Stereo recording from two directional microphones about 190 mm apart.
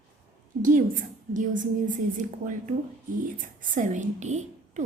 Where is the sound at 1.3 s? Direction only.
40° right (ahead or behind).